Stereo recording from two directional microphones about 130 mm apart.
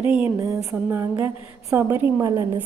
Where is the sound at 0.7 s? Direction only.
20° right (ahead or behind).